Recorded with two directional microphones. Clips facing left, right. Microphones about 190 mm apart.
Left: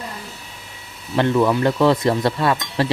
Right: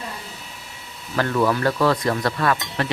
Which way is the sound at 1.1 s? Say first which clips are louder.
Left 4 dB; 25° left (ahead or behind).